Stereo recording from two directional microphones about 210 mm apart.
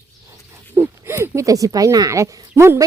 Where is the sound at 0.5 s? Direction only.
10° right (ahead or behind).